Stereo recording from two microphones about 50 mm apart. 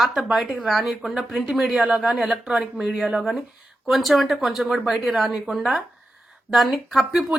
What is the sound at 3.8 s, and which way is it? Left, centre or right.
A woman's voice, centre.